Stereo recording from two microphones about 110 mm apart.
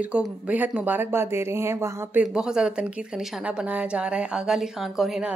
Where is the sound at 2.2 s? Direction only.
5° right (ahead or behind).